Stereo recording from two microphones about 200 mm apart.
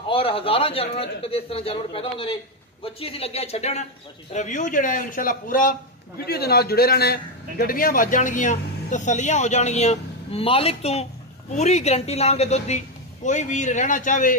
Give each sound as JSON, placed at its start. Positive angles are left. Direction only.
{"t": 0.1, "sound": "a man's voice", "side_deg": 25}